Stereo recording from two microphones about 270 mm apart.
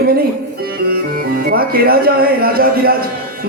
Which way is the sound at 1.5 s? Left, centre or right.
Right.